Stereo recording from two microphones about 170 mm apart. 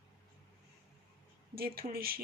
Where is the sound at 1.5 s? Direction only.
65° right (ahead or behind).